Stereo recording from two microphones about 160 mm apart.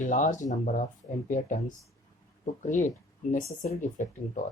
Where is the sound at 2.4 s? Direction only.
50° left (ahead or behind).